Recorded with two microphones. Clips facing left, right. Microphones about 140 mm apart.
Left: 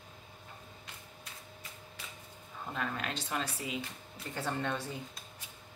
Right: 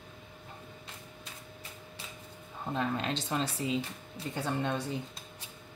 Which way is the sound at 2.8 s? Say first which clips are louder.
Right 5 dB; 25° right (ahead or behind).